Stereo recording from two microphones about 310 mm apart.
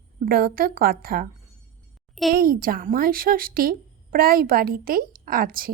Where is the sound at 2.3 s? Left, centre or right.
Right.